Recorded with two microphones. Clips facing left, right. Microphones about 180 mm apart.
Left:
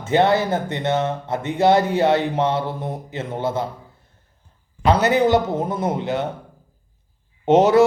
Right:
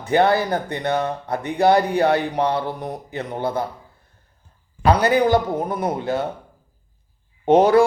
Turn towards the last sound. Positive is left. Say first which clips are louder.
# even
turn(degrees=25)  # may be behind; listen again after turning